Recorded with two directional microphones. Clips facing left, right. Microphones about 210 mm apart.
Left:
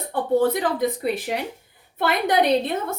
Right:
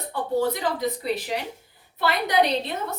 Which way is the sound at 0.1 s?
50° left (ahead or behind).